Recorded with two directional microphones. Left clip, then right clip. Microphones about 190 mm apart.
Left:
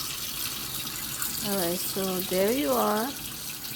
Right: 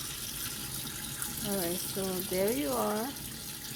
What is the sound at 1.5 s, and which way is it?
Speech, 20° left (ahead or behind).